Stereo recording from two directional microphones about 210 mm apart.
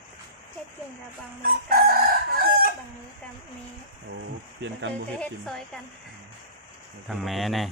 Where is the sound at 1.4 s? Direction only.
45° right (ahead or behind).